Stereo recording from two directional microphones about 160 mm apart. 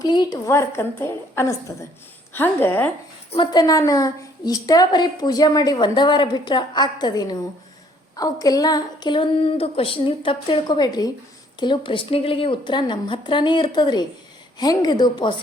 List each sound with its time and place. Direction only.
0.0 s a woman's voice: 25° left (ahead or behind)
3.3 s a woman's voice: 30° left (ahead or behind)